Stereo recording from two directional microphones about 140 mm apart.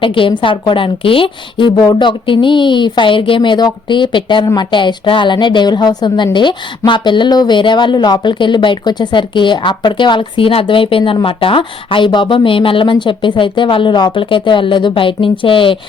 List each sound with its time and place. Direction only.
0.0 s a woman's voice: 40° left (ahead or behind)